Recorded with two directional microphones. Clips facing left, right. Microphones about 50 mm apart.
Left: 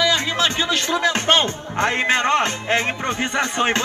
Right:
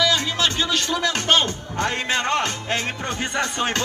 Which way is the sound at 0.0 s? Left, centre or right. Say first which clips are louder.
Left 2 dB; left.